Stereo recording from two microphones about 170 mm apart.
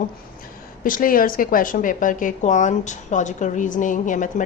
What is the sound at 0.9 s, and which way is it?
A woman's voice, 55° left (ahead or behind).